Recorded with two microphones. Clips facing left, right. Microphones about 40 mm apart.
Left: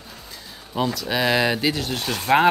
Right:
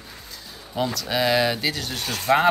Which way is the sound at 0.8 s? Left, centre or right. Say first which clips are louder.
Left 1 dB; centre.